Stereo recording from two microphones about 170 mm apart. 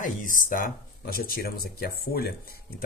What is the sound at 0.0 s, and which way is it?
Speech, 50° left (ahead or behind).